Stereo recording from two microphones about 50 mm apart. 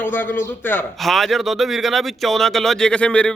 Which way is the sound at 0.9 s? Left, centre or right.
Centre.